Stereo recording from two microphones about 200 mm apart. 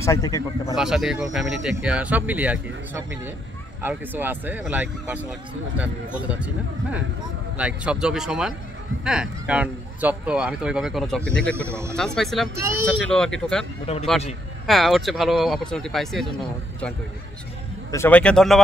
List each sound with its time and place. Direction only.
0.0 s speech: 15° left (ahead or behind)
0.7 s speech: centre (ahead or behind)
13.9 s a man's voice: 30° left (ahead or behind)
14.7 s speech: centre (ahead or behind)
17.9 s speech: 10° left (ahead or behind)